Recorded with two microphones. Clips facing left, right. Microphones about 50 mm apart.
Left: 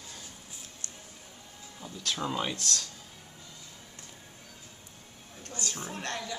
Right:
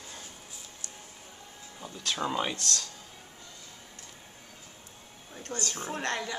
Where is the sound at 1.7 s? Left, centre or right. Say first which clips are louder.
Right 1 dB; centre.